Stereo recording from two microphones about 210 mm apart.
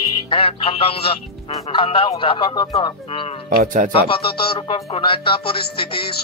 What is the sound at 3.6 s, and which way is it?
Speech, 35° right (ahead or behind).